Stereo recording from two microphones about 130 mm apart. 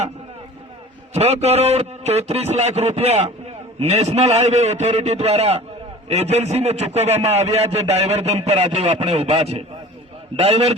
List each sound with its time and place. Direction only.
1.1 s a man's voice: 55° right (ahead or behind)